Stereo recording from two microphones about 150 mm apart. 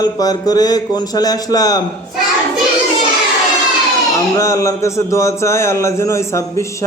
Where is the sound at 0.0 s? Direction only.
25° left (ahead or behind).